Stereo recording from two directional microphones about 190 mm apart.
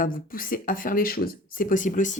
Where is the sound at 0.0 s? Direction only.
50° left (ahead or behind).